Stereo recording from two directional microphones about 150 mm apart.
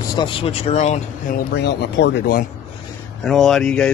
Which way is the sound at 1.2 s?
80° left.